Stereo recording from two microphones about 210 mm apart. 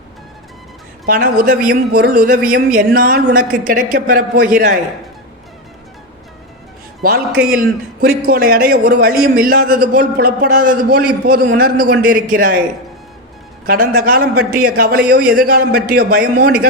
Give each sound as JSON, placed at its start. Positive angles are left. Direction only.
{"t": 1.0, "sound": "a man's voice", "side_deg": -45}
{"t": 7.0, "sound": "a man's voice", "side_deg": -45}
{"t": 13.7, "sound": "a man's voice", "side_deg": -45}